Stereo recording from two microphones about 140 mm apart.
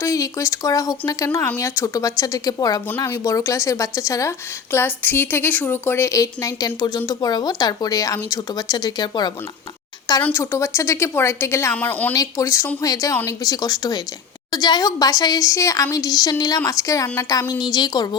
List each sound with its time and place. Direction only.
0.0 s speech: 20° left (ahead or behind)
10.2 s speech: 20° left (ahead or behind)
12.1 s a woman's voice: 25° left (ahead or behind)